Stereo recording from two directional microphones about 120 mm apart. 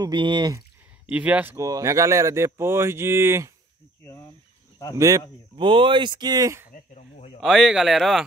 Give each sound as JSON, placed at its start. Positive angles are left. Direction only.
{"t": 0.0, "sound": "speech", "side_deg": -40}
{"t": 1.0, "sound": "speech", "side_deg": -10}
{"t": 1.6, "sound": "speech", "side_deg": -25}
{"t": 4.9, "sound": "speech", "side_deg": -30}
{"t": 5.6, "sound": "speech", "side_deg": -45}
{"t": 7.3, "sound": "speech", "side_deg": 0}